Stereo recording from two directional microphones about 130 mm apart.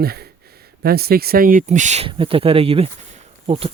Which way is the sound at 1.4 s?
90° right.